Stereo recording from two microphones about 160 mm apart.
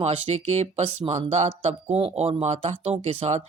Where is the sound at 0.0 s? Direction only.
45° right (ahead or behind).